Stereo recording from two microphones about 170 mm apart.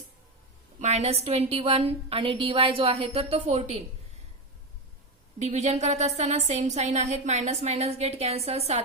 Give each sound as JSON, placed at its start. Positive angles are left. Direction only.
{"t": 0.8, "sound": "a woman's voice", "side_deg": -40}
{"t": 5.4, "sound": "a woman's voice", "side_deg": -40}